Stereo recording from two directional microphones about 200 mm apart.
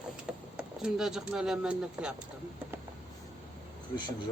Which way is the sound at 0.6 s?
5° right (ahead or behind).